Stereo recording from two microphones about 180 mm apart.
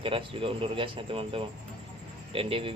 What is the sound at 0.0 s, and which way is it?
A man's voice, 30° right (ahead or behind).